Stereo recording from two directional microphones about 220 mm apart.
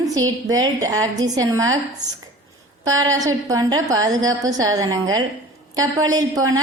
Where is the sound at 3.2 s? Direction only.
15° right (ahead or behind).